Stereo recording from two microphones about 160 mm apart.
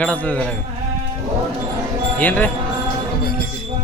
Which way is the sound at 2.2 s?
10° left (ahead or behind).